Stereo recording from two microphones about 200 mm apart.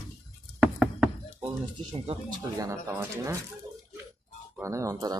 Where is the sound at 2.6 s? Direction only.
15° right (ahead or behind).